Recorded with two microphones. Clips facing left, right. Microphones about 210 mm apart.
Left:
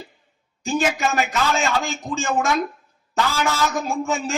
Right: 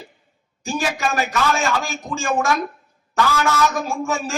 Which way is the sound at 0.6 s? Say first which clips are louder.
Left 2 dB; 20° left (ahead or behind).